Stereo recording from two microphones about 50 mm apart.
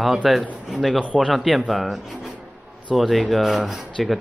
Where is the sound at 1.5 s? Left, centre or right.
Centre.